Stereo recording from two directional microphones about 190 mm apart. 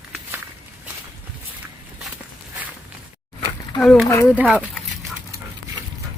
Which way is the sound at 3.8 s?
5° left (ahead or behind).